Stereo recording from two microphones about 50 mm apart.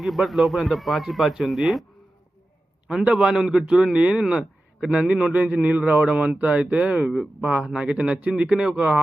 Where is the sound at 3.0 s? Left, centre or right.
Right.